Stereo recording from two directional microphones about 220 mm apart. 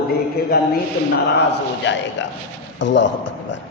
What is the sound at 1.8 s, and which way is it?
Speech, 55° left (ahead or behind).